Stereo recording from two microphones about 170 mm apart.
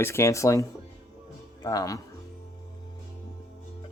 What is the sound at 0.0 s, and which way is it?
Speech, 15° left (ahead or behind).